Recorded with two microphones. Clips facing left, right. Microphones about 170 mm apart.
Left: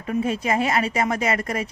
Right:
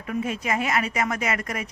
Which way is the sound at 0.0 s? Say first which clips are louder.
Left 4 dB; 30° left (ahead or behind).